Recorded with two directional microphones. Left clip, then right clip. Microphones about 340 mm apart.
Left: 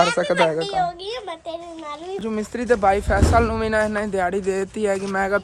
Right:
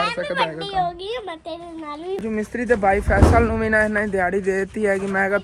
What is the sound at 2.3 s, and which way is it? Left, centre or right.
Speech, centre.